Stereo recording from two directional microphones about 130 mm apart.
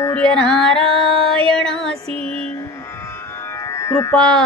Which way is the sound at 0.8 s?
40° right (ahead or behind).